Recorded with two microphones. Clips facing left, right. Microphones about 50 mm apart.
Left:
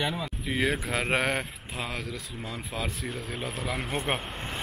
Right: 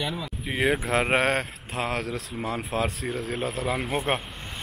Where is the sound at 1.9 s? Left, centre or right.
Right.